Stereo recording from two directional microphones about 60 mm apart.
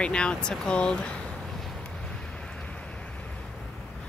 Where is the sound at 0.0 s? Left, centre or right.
Centre.